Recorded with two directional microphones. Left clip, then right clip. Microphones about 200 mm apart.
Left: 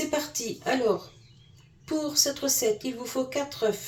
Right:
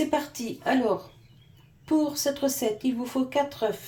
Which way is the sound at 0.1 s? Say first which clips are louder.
Right 1 dB; 45° right (ahead or behind).